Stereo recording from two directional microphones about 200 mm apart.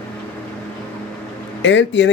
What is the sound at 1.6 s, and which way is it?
Speech, 65° left (ahead or behind).